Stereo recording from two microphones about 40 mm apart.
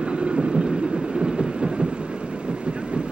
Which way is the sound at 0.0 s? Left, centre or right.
Right.